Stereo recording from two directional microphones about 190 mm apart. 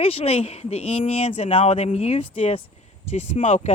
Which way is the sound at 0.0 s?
30° left (ahead or behind).